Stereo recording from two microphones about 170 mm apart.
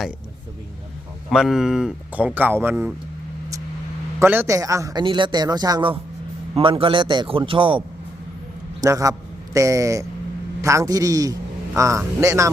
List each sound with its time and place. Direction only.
1.3 s speech: centre (ahead or behind)
4.2 s a man's voice: 15° right (ahead or behind); by 7.8 s 30° right (ahead or behind)
8.8 s a man's voice: 20° right (ahead or behind)